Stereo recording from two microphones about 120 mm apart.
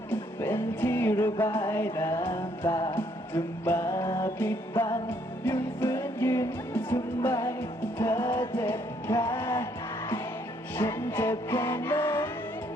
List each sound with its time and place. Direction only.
0.1 s music: 20° left (ahead or behind)
10.8 s music: 20° left (ahead or behind)